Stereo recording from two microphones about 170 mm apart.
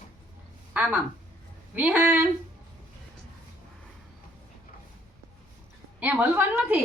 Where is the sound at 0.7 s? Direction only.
5° right (ahead or behind).